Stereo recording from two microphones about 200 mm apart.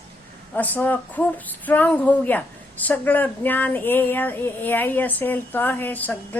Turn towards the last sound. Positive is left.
turn(degrees=10)  # may be behind; listen again after turning